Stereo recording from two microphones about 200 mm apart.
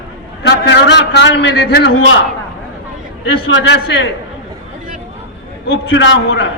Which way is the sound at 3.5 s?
60° left (ahead or behind).